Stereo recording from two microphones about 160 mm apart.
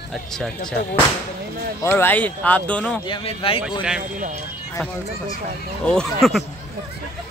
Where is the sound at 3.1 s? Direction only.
35° left (ahead or behind).